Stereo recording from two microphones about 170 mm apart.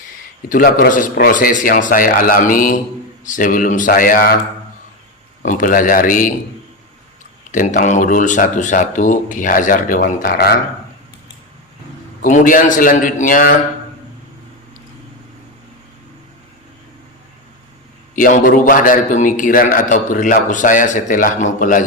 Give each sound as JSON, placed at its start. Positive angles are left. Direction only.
{"t": 0.4, "sound": "a man's voice", "side_deg": 55}
{"t": 5.4, "sound": "a man's voice", "side_deg": 50}
{"t": 7.5, "sound": "a man's voice", "side_deg": 50}
{"t": 12.2, "sound": "a man's voice", "side_deg": 50}
{"t": 18.1, "sound": "a man's voice", "side_deg": 50}